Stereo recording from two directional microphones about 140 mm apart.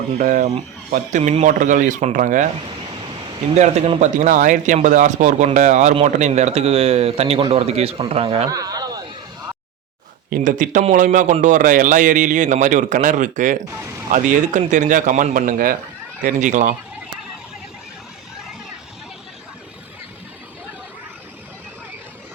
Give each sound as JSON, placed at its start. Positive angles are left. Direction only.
{"t": 0.2, "sound": "a man's voice", "side_deg": -65}
{"t": 3.5, "sound": "a man's voice", "side_deg": -50}
{"t": 8.4, "sound": "a sound", "side_deg": -25}
{"t": 10.2, "sound": "a man's voice", "side_deg": -80}
{"t": 13.7, "sound": "speech", "side_deg": -20}
{"t": 14.1, "sound": "a man's voice", "side_deg": -60}
{"t": 16.2, "sound": "a man's voice", "side_deg": -60}